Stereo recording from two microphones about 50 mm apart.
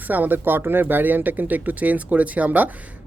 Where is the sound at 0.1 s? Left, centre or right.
Right.